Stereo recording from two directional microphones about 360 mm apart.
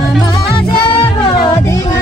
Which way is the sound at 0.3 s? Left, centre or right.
Centre.